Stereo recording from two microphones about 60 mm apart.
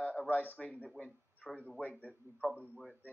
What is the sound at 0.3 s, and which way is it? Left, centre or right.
Speech, left.